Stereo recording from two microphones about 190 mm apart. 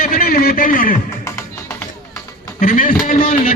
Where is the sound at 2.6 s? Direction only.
45° left (ahead or behind).